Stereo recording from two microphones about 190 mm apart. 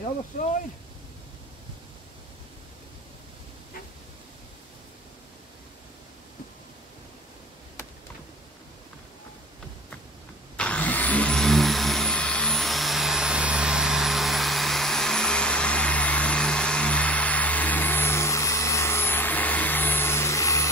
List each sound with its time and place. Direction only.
0.3 s speech: 45° left (ahead or behind)
10.6 s vehicle: 5° left (ahead or behind)